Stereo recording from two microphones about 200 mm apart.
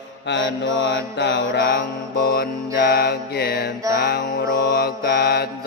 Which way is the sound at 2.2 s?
50° left (ahead or behind).